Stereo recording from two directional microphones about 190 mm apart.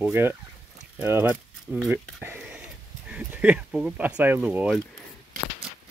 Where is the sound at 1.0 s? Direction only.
10° right (ahead or behind).